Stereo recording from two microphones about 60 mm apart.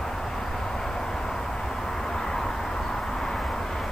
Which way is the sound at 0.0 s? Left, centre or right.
Centre.